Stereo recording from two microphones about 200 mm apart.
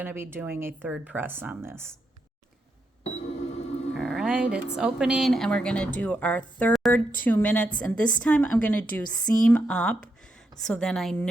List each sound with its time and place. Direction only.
0.0 s speech: 10° right (ahead or behind)
3.0 s cash register: 30° left (ahead or behind)
3.9 s a woman's voice: centre (ahead or behind)